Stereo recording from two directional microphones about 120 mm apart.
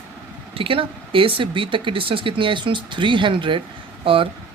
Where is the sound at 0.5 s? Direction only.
50° right (ahead or behind).